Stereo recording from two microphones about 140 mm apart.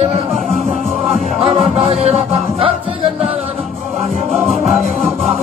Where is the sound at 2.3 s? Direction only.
Centre (ahead or behind).